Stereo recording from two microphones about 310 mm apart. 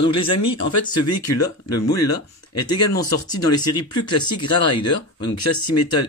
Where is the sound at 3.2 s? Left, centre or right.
Left.